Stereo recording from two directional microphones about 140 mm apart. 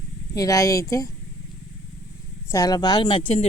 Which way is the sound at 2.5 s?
25° left (ahead or behind).